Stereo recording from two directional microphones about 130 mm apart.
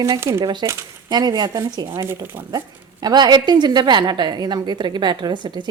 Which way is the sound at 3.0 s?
35° right (ahead or behind).